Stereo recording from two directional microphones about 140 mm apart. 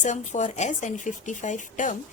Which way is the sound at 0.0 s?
60° left (ahead or behind).